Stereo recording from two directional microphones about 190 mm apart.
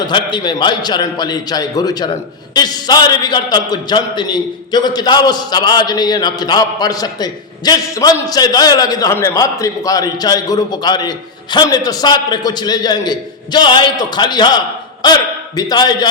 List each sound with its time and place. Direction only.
0.0 s a man's voice: 25° left (ahead or behind)